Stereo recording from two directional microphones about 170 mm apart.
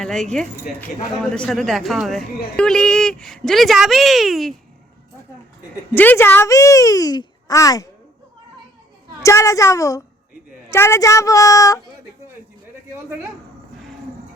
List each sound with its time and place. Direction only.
0.0 s a man's voice: 5° left (ahead or behind)
5.9 s a woman's voice: 10° left (ahead or behind)
9.2 s a woman's voice: 20° left (ahead or behind)